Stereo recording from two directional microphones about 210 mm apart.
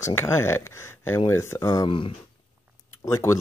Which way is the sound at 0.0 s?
10° left (ahead or behind).